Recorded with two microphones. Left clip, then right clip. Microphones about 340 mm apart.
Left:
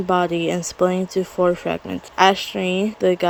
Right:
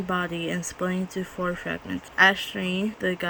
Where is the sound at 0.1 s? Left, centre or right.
Centre.